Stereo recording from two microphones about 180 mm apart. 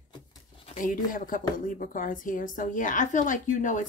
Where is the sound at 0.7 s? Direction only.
50° left (ahead or behind).